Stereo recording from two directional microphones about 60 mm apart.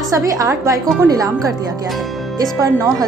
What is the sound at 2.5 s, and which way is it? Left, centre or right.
Speech, right.